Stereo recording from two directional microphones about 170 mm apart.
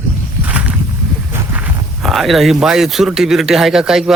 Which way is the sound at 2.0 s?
Centre (ahead or behind).